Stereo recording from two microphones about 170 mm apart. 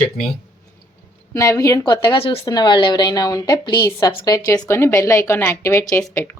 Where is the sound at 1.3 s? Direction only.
20° left (ahead or behind).